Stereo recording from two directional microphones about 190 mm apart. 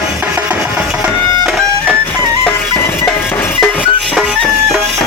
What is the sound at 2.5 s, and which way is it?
Music, 10° left (ahead or behind).